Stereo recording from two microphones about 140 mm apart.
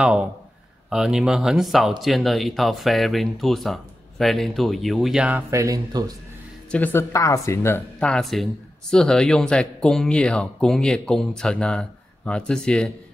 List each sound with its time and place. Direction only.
0.0 s speech: 5° right (ahead or behind)
5.3 s speech: 20° right (ahead or behind)
6.7 s speech: 15° left (ahead or behind)
8.0 s speech: 5° left (ahead or behind)